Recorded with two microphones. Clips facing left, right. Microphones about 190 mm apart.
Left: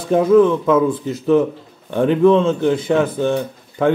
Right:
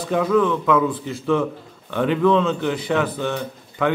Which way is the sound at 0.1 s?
25° left (ahead or behind).